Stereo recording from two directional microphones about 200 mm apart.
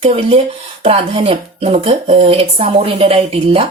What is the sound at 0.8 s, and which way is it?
Speech, 25° right (ahead or behind).